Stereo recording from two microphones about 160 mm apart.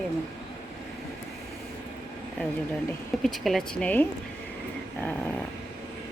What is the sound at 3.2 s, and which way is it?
Speech, centre (ahead or behind).